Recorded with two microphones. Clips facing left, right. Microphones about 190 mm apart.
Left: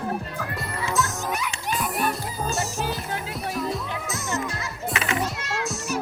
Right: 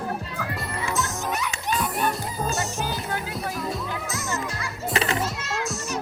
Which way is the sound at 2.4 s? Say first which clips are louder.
Left 1 dB; centre (ahead or behind).